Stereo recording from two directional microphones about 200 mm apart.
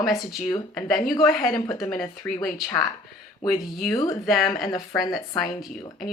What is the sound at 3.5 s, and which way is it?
Speech, centre (ahead or behind).